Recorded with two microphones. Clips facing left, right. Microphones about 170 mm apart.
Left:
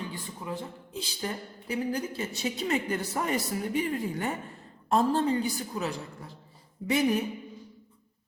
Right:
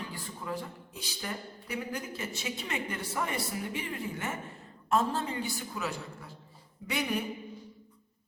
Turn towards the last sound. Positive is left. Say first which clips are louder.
# left 7 dB
turn(degrees=45)  # may be behind; listen again after turning